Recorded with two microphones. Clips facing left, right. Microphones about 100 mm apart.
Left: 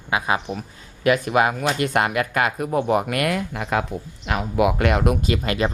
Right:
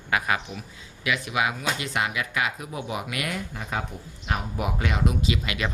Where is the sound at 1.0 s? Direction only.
45° left (ahead or behind).